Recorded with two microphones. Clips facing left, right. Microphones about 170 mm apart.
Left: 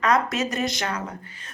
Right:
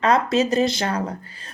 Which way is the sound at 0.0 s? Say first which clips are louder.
Right 4 dB; 30° right (ahead or behind).